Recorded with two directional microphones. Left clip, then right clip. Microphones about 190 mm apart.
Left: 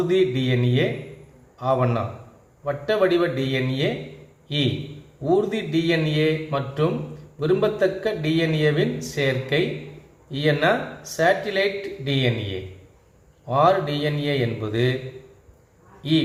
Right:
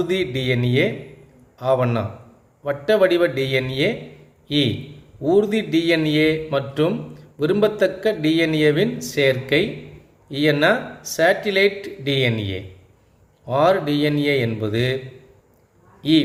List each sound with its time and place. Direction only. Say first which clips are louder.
0.1 s a man's voice: left 1 dB; 55° right (ahead or behind)
13.5 s mantra: right 1 dB; 55° right (ahead or behind)